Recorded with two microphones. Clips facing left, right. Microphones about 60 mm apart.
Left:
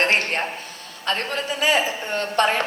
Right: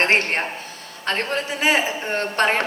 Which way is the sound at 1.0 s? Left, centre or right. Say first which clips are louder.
Right 1 dB; right.